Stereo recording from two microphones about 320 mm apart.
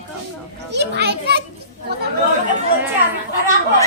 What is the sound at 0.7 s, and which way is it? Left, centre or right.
Speech, right.